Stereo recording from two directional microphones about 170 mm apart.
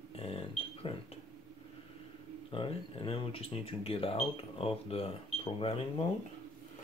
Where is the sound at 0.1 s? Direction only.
35° left (ahead or behind).